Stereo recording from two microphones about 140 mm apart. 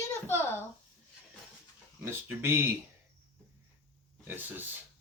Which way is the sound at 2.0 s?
15° right (ahead or behind).